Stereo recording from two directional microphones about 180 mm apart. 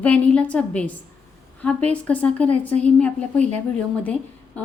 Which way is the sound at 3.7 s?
5° left (ahead or behind).